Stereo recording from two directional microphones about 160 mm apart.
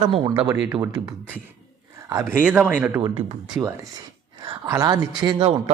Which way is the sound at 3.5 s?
20° right (ahead or behind).